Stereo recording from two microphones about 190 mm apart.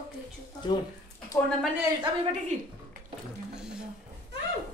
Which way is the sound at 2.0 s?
30° right (ahead or behind).